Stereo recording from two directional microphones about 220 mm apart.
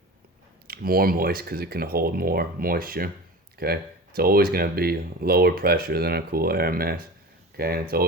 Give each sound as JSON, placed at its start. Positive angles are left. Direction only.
{"t": 0.7, "sound": "speech", "side_deg": -40}